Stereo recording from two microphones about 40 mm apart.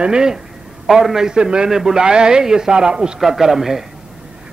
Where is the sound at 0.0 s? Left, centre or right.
Centre.